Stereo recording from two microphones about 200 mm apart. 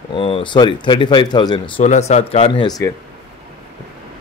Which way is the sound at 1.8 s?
35° left (ahead or behind).